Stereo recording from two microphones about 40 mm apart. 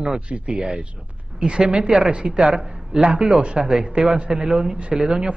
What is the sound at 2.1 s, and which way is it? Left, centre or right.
A man's voice, right.